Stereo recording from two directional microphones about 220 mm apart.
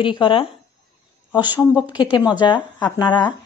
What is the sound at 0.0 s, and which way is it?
Speech, 20° left (ahead or behind).